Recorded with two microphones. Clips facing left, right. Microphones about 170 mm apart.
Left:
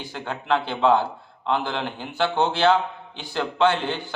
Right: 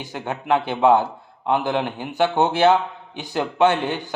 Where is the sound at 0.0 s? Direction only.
20° right (ahead or behind).